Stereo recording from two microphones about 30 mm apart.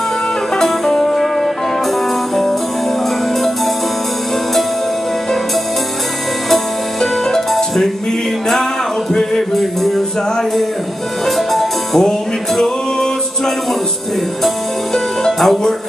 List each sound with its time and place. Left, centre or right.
0.6 s music: centre
6.5 s music: centre
9.6 s music: centre
11.2 s music: centre
12.5 s a capella: centre
15.3 s music: centre